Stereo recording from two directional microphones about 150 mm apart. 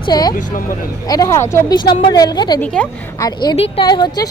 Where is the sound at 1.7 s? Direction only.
30° left (ahead or behind).